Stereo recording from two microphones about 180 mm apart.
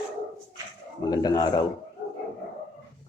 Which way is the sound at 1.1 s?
20° left (ahead or behind).